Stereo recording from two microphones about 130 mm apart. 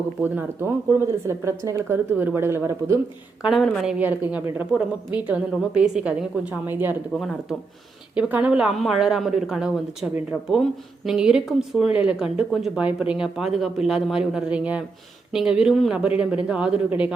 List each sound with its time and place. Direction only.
0.2 s a woman's voice: 15° right (ahead or behind)
3.4 s a woman's voice: centre (ahead or behind)
8.1 s a woman's voice: 10° right (ahead or behind)